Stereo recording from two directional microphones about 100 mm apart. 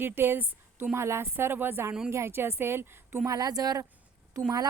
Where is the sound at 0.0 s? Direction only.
20° right (ahead or behind).